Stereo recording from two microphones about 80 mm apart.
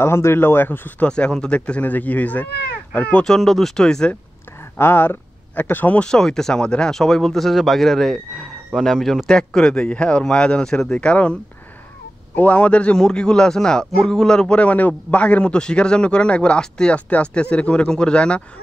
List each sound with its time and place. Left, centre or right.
0.0 s a man's voice: left; by 4.2 s centre
4.7 s speech: left
6.0 s a man's voice: centre
12.4 s a man's voice: centre